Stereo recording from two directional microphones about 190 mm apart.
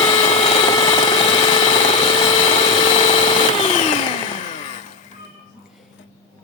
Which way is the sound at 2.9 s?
30° left (ahead or behind).